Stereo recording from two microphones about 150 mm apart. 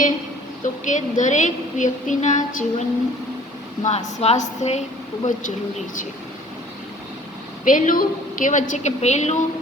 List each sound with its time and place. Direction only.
0.9 s a woman's voice: 55° left (ahead or behind)
3.8 s a woman's voice: 45° left (ahead or behind)
7.6 s a woman's voice: 60° left (ahead or behind)